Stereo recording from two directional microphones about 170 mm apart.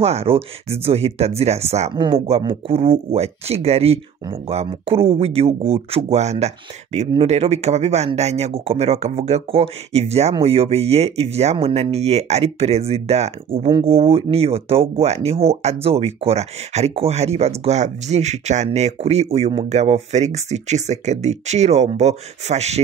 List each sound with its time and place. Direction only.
0.0 s speech: 35° right (ahead or behind)